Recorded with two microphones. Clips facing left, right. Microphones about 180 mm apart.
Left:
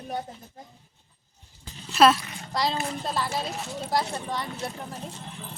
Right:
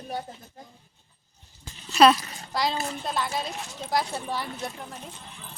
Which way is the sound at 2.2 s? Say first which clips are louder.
Left 1 dB; 35° right (ahead or behind).